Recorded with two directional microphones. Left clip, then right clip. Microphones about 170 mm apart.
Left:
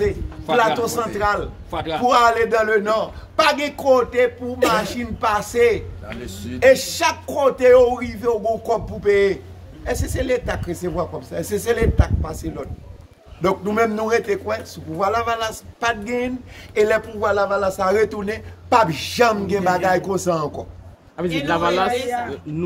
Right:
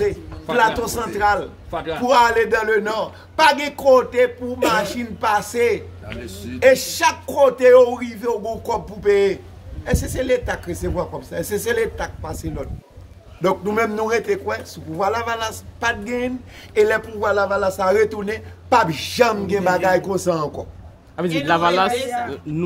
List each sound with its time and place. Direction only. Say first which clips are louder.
0.6 s a man's voice: even; 5° right (ahead or behind)
1.7 s a man's voice: left 1 dB; 60° left (ahead or behind)
2.0 s a man's voice: even; 5° right (ahead or behind)
6.2 s a man's voice: even; 45° left (ahead or behind)
6.6 s a man's voice: even; 5° right (ahead or behind)
21.5 s a man's voice: right 2 dB; 40° right (ahead or behind)